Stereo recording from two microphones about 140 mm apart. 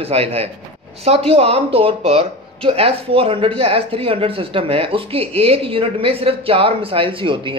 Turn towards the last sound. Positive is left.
turn(degrees=-35)  # may be behind; listen again after turning